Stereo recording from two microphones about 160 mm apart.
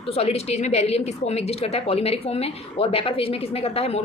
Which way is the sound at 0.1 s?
40° left (ahead or behind).